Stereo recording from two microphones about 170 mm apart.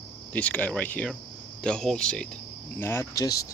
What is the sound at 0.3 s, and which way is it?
Speech, 10° left (ahead or behind).